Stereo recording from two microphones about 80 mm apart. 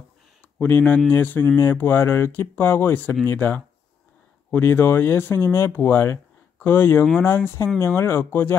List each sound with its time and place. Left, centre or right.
0.6 s speech: left